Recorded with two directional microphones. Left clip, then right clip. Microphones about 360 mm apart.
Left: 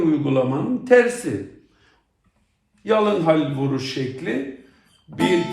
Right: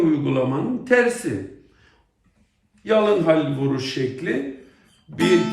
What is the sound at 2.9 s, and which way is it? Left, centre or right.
Music, centre.